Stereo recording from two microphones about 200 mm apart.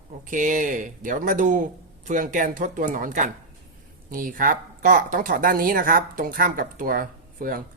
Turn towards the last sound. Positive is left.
turn(degrees=-45)  # may be behind; listen again after turning